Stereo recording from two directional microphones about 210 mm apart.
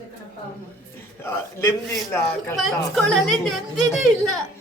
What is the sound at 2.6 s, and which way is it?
Speech, centre (ahead or behind).